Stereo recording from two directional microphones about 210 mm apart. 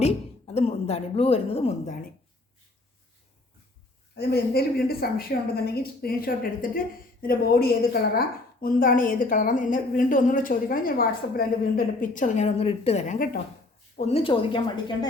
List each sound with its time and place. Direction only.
0.0 s a woman's voice: 30° left (ahead or behind)
4.1 s a woman's voice: 50° left (ahead or behind); by 14.9 s 25° left (ahead or behind)